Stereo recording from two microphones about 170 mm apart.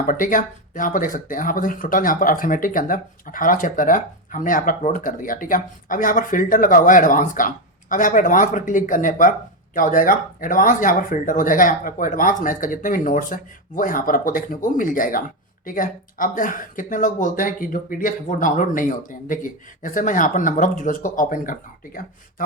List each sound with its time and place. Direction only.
0.0 s speech: 50° left (ahead or behind)